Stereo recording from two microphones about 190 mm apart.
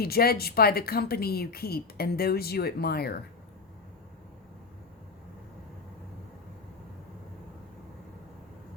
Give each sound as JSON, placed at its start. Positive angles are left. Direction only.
{"t": 0.0, "sound": "a woman's voice", "side_deg": 55}